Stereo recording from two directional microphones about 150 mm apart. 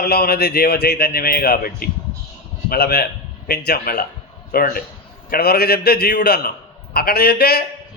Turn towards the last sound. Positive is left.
turn(degrees=90)